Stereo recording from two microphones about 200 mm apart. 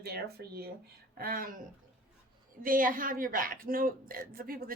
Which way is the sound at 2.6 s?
45° right (ahead or behind).